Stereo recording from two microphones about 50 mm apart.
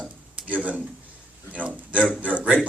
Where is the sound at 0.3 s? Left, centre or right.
Right.